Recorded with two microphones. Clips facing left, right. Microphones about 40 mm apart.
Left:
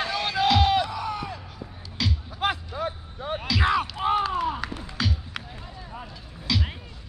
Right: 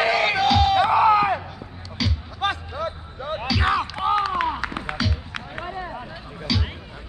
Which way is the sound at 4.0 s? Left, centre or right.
Right.